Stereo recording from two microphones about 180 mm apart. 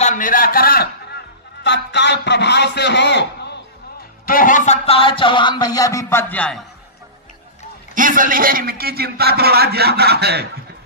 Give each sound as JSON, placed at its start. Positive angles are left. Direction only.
{"t": 0.0, "sound": "a sound", "side_deg": 45}
{"t": 4.3, "sound": "speech", "side_deg": 50}
{"t": 7.9, "sound": "a man's voice", "side_deg": -50}